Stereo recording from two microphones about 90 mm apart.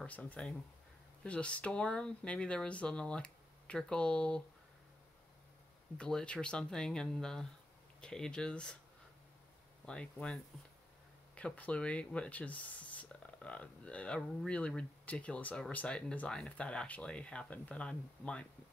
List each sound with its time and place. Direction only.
0.0 s speech: 15° left (ahead or behind)
5.9 s speech: 10° left (ahead or behind)
9.8 s speech: 10° left (ahead or behind)